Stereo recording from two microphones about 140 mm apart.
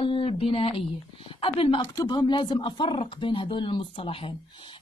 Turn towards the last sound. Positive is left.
turn(degrees=35)  # may be behind; listen again after turning